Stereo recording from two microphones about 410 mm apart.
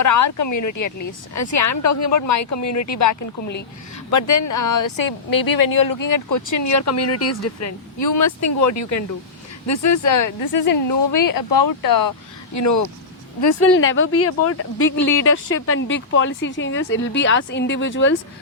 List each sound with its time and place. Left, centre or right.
0.0 s speech: left
4.1 s speech: left
12.5 s speech: left
13.4 s speech: left